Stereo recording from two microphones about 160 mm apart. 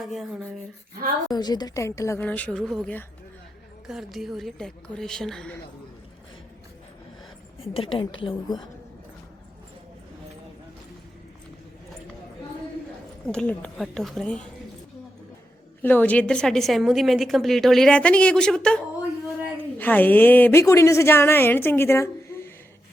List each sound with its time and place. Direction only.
0.0 s a woman's voice: centre (ahead or behind)
1.3 s a woman's voice: 25° left (ahead or behind); by 5.5 s 5° left (ahead or behind)
7.6 s a woman's voice: 35° left (ahead or behind)
13.2 s a woman's voice: 5° left (ahead or behind)
15.8 s a woman's voice: 10° left (ahead or behind)
19.8 s a woman's voice: 10° left (ahead or behind)